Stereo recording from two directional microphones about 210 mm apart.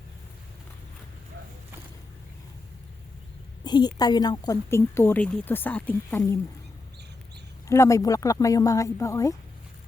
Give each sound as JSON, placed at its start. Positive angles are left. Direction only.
{"t": 3.6, "sound": "a woman's voice", "side_deg": 20}
{"t": 7.7, "sound": "a woman's voice", "side_deg": 15}